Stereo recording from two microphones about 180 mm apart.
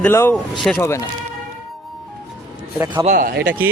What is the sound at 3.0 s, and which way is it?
Speech, 50° right (ahead or behind).